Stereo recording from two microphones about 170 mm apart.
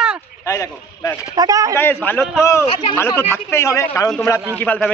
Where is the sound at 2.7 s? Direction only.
30° left (ahead or behind).